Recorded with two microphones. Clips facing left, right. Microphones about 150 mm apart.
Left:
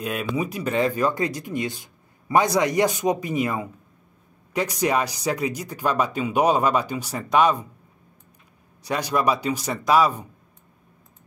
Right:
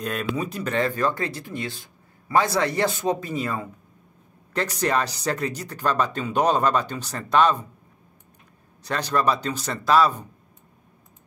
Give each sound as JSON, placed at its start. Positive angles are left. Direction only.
{"t": 0.0, "sound": "speech", "side_deg": 10}
{"t": 8.8, "sound": "speech", "side_deg": 10}